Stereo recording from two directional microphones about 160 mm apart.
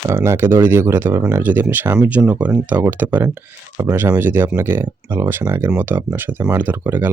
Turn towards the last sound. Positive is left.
turn(degrees=-15)  # may be behind; listen again after turning